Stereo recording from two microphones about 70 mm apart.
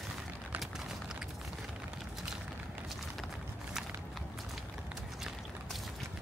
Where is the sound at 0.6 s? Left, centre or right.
Centre.